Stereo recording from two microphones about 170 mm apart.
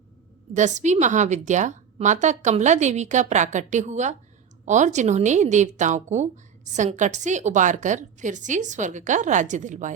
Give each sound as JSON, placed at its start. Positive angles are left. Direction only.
{"t": 0.5, "sound": "a woman's voice", "side_deg": -45}